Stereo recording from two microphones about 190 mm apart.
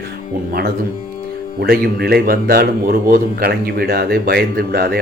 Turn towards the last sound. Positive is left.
turn(degrees=-50)  # may be behind; listen again after turning